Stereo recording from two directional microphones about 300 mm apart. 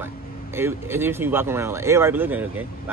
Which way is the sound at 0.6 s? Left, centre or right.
Centre.